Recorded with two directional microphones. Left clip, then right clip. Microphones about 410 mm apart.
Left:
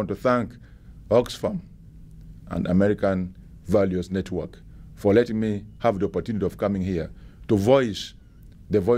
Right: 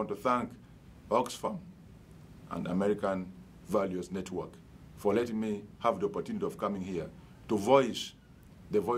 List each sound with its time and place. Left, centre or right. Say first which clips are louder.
0.0 s speech: left 8 dB; left
2.5 s a man's voice: left 9 dB; left